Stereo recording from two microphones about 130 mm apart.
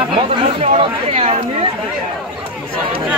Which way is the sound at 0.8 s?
50° right (ahead or behind).